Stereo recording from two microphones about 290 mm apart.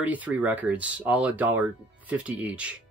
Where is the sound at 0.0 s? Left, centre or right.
Centre.